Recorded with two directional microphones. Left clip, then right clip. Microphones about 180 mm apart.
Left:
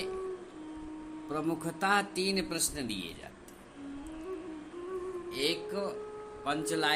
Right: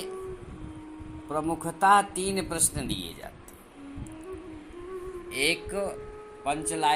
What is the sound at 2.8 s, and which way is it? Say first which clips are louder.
Speech: right 4 dB; 25° left (ahead or behind).